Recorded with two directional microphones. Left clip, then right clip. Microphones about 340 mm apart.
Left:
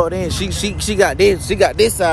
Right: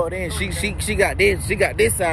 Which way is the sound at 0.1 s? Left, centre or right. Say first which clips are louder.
Left 4 dB; centre.